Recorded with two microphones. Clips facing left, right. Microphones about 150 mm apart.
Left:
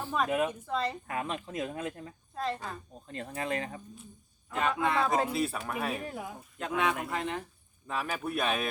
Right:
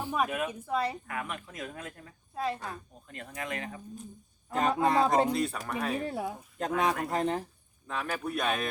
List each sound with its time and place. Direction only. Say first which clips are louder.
0.0 s a sound: right 1 dB; 15° right (ahead or behind)
0.3 s speech: left 4 dB; 25° left (ahead or behind)
0.7 s a woman's voice: right 2 dB; 10° right (ahead or behind)
1.0 s speech: left 3 dB; 25° left (ahead or behind)
2.3 s speech: right 1 dB; 10° right (ahead or behind)
3.1 s speech: left 4 dB; 30° left (ahead or behind)
4.4 s speech: right 3 dB; 40° right (ahead or behind)
5.3 s speech: right 1 dB; 5° left (ahead or behind)
6.1 s speech: right 5 dB; 30° right (ahead or behind)
7.9 s speech: even; 5° left (ahead or behind)